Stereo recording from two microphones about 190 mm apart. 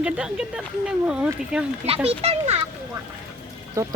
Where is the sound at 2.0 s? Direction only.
35° right (ahead or behind).